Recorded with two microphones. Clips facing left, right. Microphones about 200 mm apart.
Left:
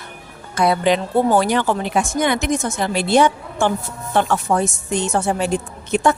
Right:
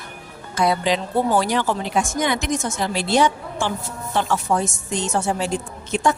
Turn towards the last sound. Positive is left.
turn(degrees=60)  # may be behind; listen again after turning